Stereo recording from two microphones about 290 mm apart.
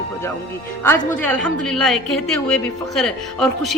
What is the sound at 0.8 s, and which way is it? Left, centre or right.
A woman's voice, centre.